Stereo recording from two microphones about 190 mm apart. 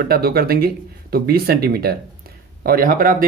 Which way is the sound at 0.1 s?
55° right (ahead or behind).